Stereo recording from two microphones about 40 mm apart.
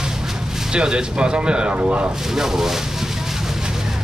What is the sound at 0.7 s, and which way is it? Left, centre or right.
Speech, right.